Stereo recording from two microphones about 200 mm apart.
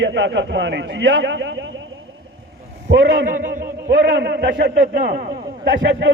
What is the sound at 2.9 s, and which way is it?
Speech, 65° right (ahead or behind).